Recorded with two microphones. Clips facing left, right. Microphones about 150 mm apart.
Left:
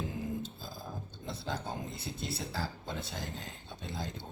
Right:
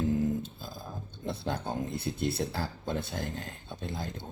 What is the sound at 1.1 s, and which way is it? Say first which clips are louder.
Speech: right 6 dB; 55° right (ahead or behind).